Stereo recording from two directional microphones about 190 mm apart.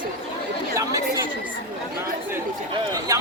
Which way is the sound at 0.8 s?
15° right (ahead or behind).